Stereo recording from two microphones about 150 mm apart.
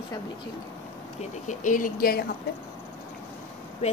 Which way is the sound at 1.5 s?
60° left (ahead or behind).